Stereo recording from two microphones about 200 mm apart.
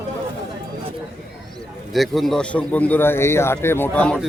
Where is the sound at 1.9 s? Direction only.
Centre (ahead or behind).